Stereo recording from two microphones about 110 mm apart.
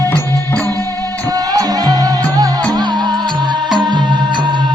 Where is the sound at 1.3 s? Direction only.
35° right (ahead or behind).